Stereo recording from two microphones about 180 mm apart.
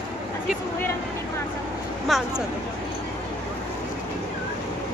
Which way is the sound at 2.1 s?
Centre (ahead or behind).